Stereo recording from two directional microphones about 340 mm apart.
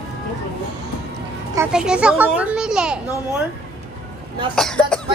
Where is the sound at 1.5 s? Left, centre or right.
Centre.